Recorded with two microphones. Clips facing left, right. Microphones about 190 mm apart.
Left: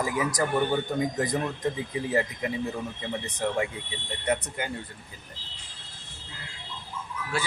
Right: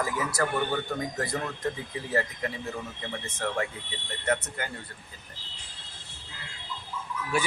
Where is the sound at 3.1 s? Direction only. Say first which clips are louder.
Left 3 dB; 15° left (ahead or behind).